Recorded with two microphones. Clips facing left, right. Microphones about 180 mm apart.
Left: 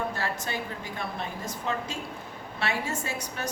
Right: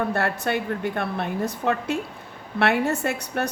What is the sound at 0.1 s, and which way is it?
A woman's voice, 65° right (ahead or behind).